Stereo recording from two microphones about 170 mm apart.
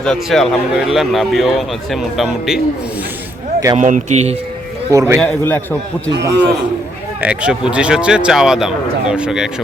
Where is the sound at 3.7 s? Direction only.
45° right (ahead or behind).